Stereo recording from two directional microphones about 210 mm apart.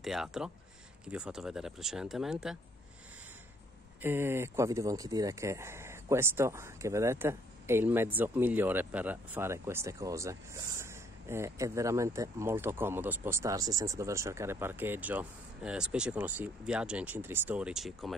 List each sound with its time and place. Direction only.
0.0 s speech: centre (ahead or behind)
4.0 s speech: 10° right (ahead or behind)